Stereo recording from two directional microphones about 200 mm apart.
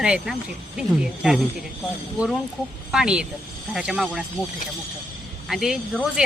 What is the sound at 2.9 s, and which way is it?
Speech, 5° right (ahead or behind).